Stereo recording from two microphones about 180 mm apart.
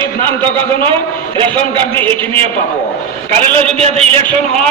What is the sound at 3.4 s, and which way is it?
Speech, 35° right (ahead or behind).